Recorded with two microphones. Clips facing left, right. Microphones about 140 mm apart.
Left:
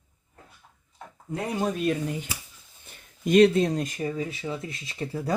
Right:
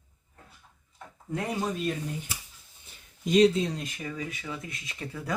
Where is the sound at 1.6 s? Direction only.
70° left (ahead or behind).